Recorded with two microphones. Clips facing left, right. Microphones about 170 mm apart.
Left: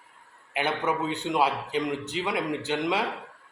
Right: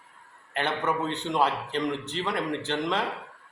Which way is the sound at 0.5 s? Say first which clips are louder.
Left 1 dB; 15° left (ahead or behind).